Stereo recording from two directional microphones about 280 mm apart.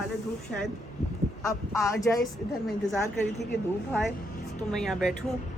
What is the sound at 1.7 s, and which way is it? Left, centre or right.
Speech, centre.